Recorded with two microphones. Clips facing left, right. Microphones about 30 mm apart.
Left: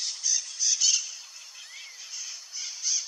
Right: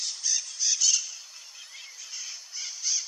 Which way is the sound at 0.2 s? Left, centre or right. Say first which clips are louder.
Even; centre.